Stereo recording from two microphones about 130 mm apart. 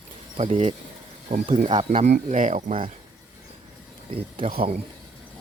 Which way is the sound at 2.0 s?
65° right (ahead or behind).